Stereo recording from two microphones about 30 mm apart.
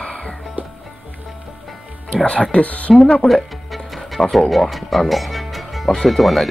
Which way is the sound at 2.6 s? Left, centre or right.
Left.